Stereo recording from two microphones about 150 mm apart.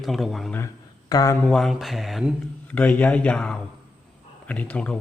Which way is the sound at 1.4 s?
Centre (ahead or behind).